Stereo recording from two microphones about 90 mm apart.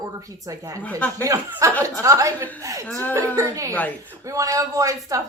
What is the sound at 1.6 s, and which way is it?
A woman's voice, 35° right (ahead or behind).